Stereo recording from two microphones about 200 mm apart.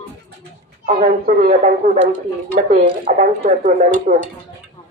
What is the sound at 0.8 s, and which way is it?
A woman's voice, 40° right (ahead or behind).